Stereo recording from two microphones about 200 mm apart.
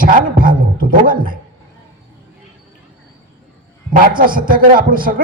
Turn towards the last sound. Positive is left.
turn(degrees=-45)  # may be behind; listen again after turning